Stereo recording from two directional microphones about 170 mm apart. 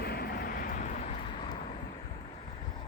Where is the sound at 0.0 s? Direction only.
65° left (ahead or behind).